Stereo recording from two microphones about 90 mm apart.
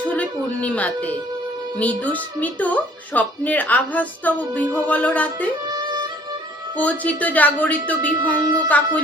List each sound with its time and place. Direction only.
0.0 s music: 15° left (ahead or behind)
1.8 s a woman's voice: 15° left (ahead or behind)
5.7 s music: 50° right (ahead or behind)
6.7 s a woman's voice: 15° left (ahead or behind)